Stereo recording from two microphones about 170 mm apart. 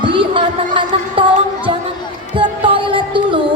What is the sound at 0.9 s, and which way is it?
Music, 30° right (ahead or behind).